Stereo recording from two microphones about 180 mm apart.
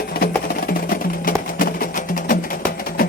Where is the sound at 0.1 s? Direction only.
55° left (ahead or behind).